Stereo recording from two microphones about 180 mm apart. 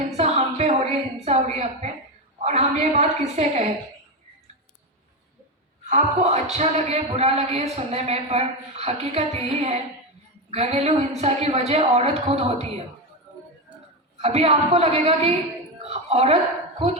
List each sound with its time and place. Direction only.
0.2 s a woman's voice: 35° right (ahead or behind)
5.9 s speech: 40° right (ahead or behind)
14.2 s speech: 35° right (ahead or behind)
15.8 s a sound: 35° right (ahead or behind)